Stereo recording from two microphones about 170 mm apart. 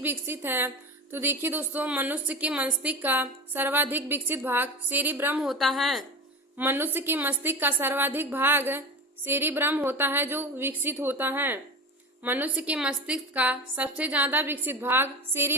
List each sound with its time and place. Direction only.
0.0 s a woman's voice: 10° right (ahead or behind)
5.4 s speech: centre (ahead or behind)
6.6 s a woman's voice: 10° right (ahead or behind)